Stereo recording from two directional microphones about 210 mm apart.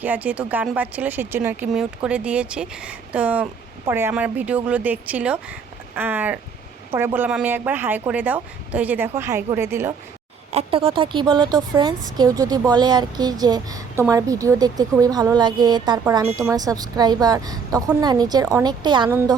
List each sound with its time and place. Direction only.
0.0 s speech: 10° right (ahead or behind)
10.5 s speech: 30° right (ahead or behind)